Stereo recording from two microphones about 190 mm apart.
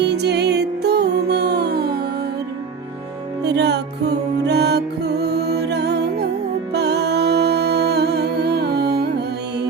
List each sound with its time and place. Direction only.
0.0 s music: 60° right (ahead or behind)
3.4 s music: 65° right (ahead or behind)